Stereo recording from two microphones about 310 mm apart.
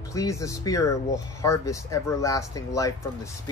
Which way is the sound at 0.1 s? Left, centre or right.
Centre.